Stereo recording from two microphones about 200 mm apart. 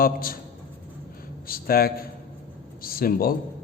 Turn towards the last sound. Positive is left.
turn(degrees=45)  # may be behind; listen again after turning